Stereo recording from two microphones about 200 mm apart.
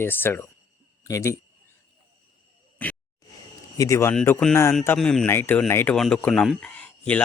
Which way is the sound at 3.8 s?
15° left (ahead or behind).